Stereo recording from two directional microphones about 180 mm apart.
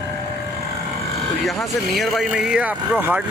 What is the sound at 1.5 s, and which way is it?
Speech, centre (ahead or behind).